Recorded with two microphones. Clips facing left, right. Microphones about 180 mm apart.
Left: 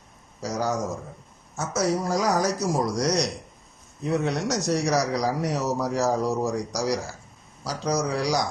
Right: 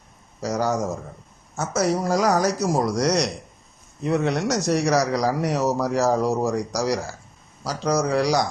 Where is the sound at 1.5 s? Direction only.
65° right (ahead or behind).